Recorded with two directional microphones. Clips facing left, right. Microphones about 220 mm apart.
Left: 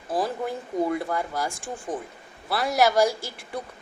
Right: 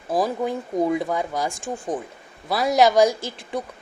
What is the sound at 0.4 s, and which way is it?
A woman's voice, 15° right (ahead or behind).